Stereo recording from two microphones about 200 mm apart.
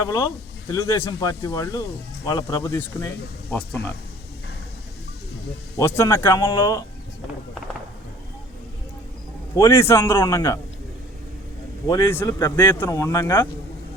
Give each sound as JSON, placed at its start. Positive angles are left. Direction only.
{"t": 0.0, "sound": "speech", "side_deg": 15}
{"t": 5.7, "sound": "speech", "side_deg": 15}
{"t": 6.4, "sound": "speech", "side_deg": 25}
{"t": 9.6, "sound": "speech", "side_deg": 15}
{"t": 11.9, "sound": "speech", "side_deg": 15}